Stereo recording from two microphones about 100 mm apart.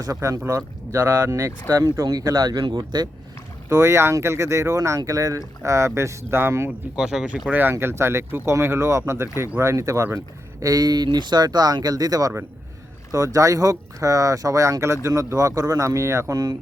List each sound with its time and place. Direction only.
0.0 s speech: 35° right (ahead or behind)
3.7 s speech: 25° right (ahead or behind)
6.7 s speech: 5° right (ahead or behind)
7.5 s speech: 20° right (ahead or behind)